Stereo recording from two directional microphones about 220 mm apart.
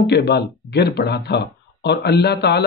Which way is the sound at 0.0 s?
50° left (ahead or behind).